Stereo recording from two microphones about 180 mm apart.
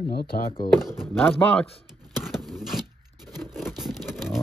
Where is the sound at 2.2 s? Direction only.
Centre (ahead or behind).